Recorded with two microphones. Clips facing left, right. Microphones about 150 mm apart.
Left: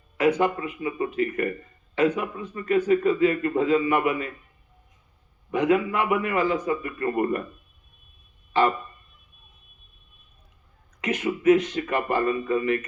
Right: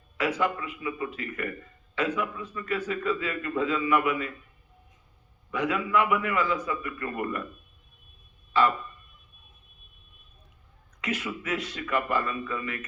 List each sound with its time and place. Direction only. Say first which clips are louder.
0.2 s a man's voice: left 6 dB; 25° left (ahead or behind)
5.5 s a man's voice: left 6 dB; 25° left (ahead or behind)
11.0 s a man's voice: left 11 dB; 20° left (ahead or behind)